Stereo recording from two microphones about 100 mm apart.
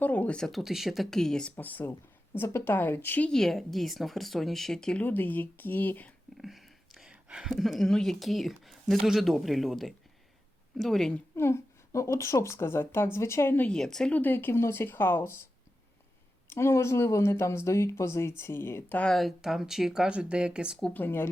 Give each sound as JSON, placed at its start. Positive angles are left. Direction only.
{"t": 0.0, "sound": "speech", "side_deg": 15}
{"t": 1.5, "sound": "speech", "side_deg": 20}
{"t": 3.2, "sound": "speech", "side_deg": 5}
{"t": 6.3, "sound": "a sound", "side_deg": 0}
{"t": 7.5, "sound": "speech", "side_deg": 0}
{"t": 11.3, "sound": "speech", "side_deg": 25}
{"t": 13.7, "sound": "speech", "side_deg": 5}
{"t": 14.1, "sound": "speech", "side_deg": 20}
{"t": 16.5, "sound": "speech", "side_deg": 25}
{"t": 19.1, "sound": "speech", "side_deg": 0}
{"t": 20.9, "sound": "speech", "side_deg": 20}